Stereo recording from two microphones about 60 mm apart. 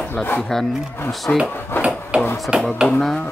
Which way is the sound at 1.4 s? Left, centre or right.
Left.